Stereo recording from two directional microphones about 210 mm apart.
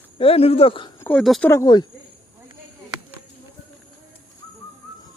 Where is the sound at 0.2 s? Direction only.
25° left (ahead or behind).